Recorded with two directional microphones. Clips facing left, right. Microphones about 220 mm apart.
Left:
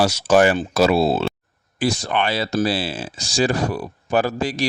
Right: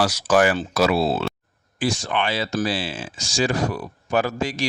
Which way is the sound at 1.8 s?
40° left (ahead or behind).